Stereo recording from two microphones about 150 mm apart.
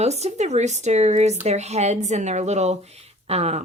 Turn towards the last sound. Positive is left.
turn(degrees=-45)  # may be behind; listen again after turning